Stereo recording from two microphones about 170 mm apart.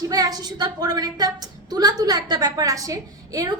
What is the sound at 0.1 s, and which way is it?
A woman's voice, 20° right (ahead or behind).